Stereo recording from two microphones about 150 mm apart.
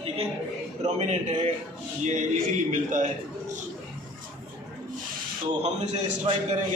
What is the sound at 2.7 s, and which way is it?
Speech, 60° right (ahead or behind).